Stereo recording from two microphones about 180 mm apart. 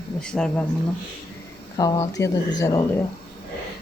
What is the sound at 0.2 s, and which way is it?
Speech, 5° left (ahead or behind).